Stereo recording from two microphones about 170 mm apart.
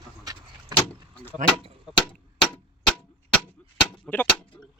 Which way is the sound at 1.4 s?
50° right (ahead or behind).